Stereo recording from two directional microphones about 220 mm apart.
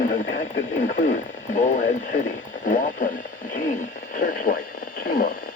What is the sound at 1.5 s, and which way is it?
Speech, 35° left (ahead or behind).